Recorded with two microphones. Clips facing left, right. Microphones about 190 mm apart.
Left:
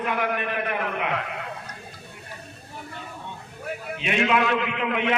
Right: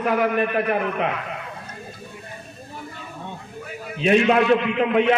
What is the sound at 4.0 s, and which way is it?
A man's voice, 40° right (ahead or behind).